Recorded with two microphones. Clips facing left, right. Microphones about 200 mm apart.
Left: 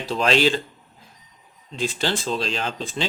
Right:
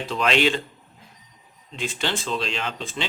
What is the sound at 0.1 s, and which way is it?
Speech, 35° left (ahead or behind).